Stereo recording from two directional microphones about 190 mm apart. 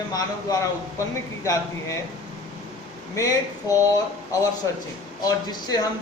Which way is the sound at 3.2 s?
15° left (ahead or behind).